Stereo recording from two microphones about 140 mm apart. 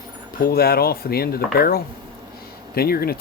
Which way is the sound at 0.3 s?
90° left.